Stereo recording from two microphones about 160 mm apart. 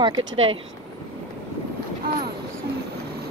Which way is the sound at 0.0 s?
30° right (ahead or behind).